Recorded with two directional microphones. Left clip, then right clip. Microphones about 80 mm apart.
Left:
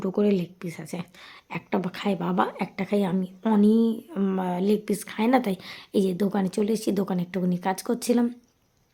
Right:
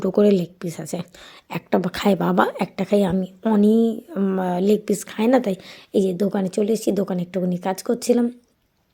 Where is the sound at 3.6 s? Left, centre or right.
Right.